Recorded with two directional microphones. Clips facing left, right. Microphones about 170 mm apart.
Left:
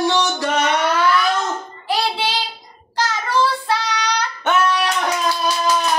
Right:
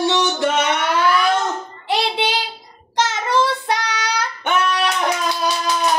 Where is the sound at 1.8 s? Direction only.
20° right (ahead or behind).